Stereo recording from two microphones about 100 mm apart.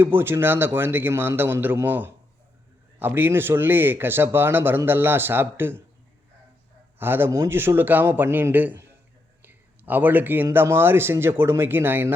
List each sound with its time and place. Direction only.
0.0 s a man's voice: 20° right (ahead or behind)
7.0 s a man's voice: 20° right (ahead or behind)